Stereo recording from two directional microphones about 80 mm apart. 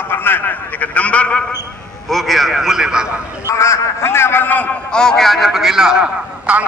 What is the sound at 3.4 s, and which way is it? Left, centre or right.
A man's voice, left.